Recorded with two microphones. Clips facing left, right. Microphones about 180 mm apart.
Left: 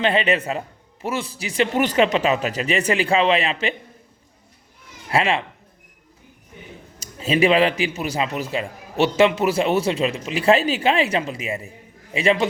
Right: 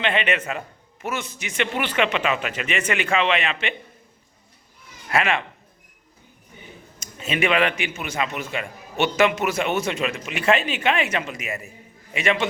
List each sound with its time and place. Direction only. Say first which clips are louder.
0.0 s a man's voice: left 4 dB; 35° left (ahead or behind)
5.0 s speech: left 2 dB; 30° left (ahead or behind)
7.0 s a man's voice: left 6 dB; 35° left (ahead or behind)